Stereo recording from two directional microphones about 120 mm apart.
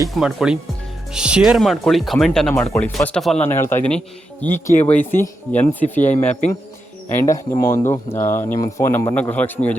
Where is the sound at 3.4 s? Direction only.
20° left (ahead or behind).